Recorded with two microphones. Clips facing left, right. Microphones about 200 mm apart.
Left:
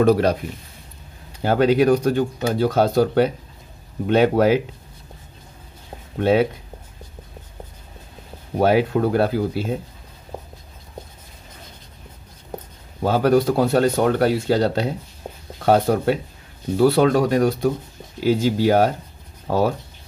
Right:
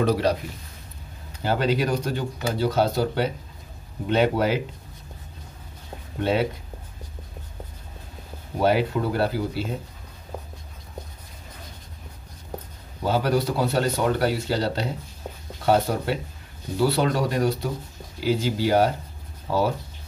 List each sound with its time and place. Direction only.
0.0 s speech: 50° left (ahead or behind)
1.4 s speech: 55° left (ahead or behind)
8.5 s speech: 50° left (ahead or behind)
13.0 s speech: 50° left (ahead or behind)